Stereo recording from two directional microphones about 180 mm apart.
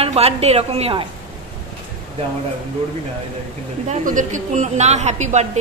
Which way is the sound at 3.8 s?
45° right (ahead or behind).